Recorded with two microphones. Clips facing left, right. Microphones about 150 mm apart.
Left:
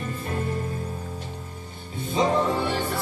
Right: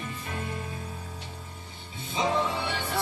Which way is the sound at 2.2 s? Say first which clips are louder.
Left 5 dB; 45° left (ahead or behind).